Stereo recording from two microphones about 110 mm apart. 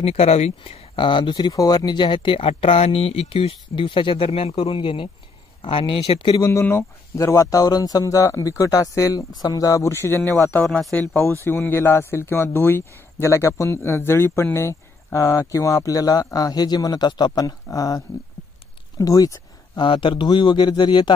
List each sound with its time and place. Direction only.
0.0 s speech: 70° left (ahead or behind)
0.9 s speech: 45° left (ahead or behind)
6.3 s speech: 30° left (ahead or behind)
18.9 s a sound: 35° left (ahead or behind)
19.8 s speech: 50° left (ahead or behind)